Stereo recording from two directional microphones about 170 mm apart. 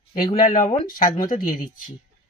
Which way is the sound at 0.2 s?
30° left (ahead or behind).